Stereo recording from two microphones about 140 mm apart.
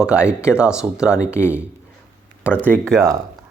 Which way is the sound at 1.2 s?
20° left (ahead or behind).